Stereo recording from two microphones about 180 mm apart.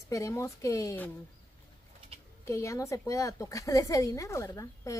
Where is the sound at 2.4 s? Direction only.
15° left (ahead or behind).